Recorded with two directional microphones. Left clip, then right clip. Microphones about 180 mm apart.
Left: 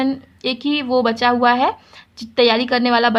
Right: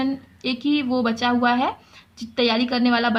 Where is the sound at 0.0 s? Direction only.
40° left (ahead or behind).